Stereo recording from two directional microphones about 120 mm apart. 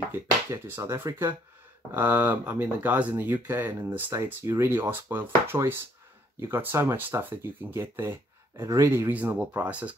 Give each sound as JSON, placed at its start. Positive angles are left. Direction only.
{"t": 0.1, "sound": "speech", "side_deg": -20}